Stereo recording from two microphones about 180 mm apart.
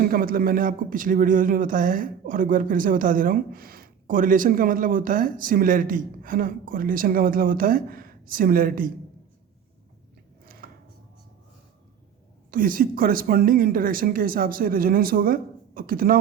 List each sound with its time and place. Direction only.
0.0 s speech: 55° right (ahead or behind)
10.4 s a sound: 55° right (ahead or behind)
12.5 s speech: 50° right (ahead or behind)